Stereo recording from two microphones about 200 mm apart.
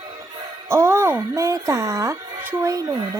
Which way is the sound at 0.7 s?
15° right (ahead or behind).